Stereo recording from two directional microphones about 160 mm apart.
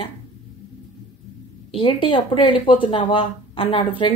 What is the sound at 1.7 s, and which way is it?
Speech, 35° left (ahead or behind).